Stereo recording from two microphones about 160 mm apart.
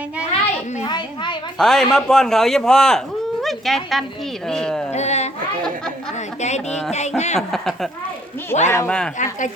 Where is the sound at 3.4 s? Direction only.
Centre (ahead or behind).